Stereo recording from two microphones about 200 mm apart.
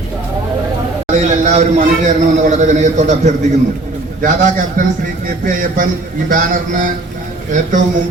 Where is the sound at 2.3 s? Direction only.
35° right (ahead or behind).